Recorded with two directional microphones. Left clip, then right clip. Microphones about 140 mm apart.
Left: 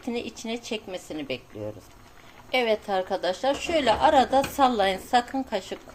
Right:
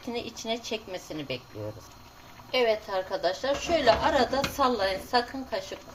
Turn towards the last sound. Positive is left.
turn(degrees=70)  # may be behind; listen again after turning